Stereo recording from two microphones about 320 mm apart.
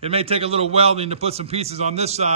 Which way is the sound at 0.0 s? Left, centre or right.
Centre.